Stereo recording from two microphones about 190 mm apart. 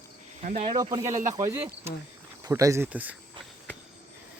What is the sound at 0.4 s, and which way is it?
Speech, 30° right (ahead or behind).